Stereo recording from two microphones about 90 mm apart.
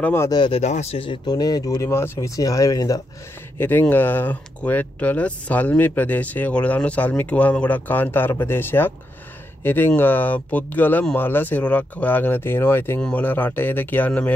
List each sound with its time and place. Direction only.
0.0 s speech: 25° left (ahead or behind)
0.5 s speech: 90° left
1.2 s speech: 45° left (ahead or behind)
1.8 s speech: 30° left (ahead or behind)
2.1 s speech: 40° left (ahead or behind)
3.5 s speech: 20° left (ahead or behind)